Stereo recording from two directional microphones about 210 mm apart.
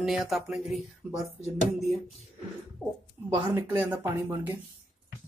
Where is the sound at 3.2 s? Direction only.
15° right (ahead or behind).